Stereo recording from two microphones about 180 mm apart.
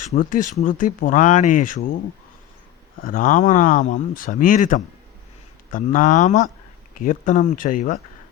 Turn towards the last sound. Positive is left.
turn(degrees=50)  # may be behind; listen again after turning